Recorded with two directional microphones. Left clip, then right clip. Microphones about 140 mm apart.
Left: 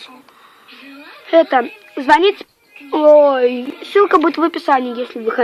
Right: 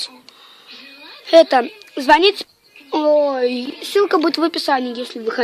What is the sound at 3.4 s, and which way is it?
Speech, 45° right (ahead or behind).